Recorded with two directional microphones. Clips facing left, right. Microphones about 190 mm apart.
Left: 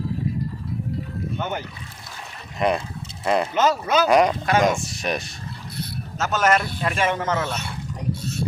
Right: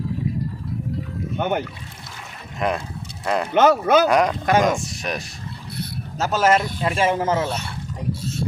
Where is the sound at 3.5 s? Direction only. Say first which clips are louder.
Right 5 dB; 55° right (ahead or behind).